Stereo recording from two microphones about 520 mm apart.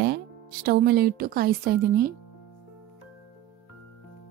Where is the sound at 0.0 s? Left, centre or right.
Centre.